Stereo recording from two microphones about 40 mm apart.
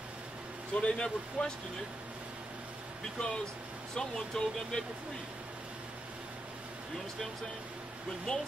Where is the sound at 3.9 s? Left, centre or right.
Centre.